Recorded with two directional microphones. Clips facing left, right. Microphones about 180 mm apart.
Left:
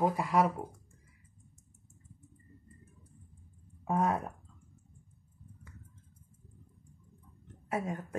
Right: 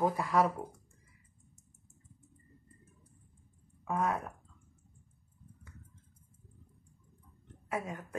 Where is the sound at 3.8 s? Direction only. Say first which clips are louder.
Left 3 dB; 30° left (ahead or behind).